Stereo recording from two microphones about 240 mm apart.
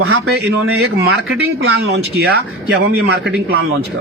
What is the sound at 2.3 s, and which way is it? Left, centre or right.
A man's voice, right.